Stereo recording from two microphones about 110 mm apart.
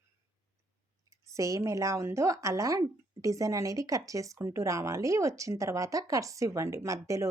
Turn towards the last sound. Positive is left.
turn(degrees=-30)  # may be behind; listen again after turning